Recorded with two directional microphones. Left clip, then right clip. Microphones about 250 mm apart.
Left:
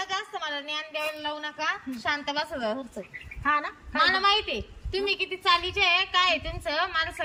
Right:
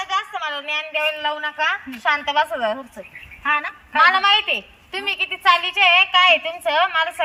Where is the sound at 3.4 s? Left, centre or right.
Centre.